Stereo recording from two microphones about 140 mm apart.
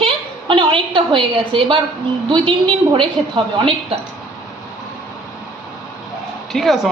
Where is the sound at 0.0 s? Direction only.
35° right (ahead or behind).